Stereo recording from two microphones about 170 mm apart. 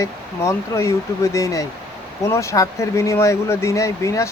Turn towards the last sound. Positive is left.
turn(degrees=15)  # may be behind; listen again after turning